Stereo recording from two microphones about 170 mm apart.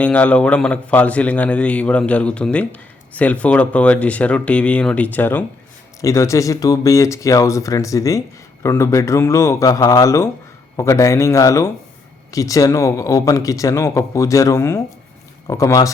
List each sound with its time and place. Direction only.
0.0 s a man's voice: 10° left (ahead or behind)